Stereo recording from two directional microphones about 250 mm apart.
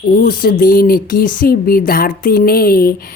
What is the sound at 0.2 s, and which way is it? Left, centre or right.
A woman's voice, left.